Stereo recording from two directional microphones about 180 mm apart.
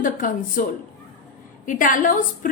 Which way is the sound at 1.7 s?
45° left (ahead or behind).